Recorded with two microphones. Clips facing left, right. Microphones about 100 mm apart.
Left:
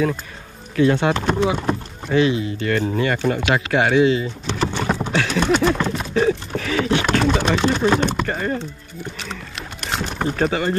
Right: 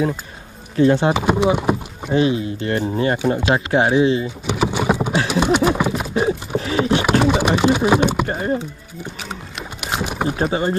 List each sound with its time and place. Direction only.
0.7 s speech: 20° right (ahead or behind)
3.3 s speech: 25° right (ahead or behind)
4.6 s speech: 10° right (ahead or behind)
6.2 s a sound: 20° right (ahead or behind)
8.3 s speech: 25° right (ahead or behind)
9.2 s boat: 5° right (ahead or behind)
10.4 s speech: 20° right (ahead or behind)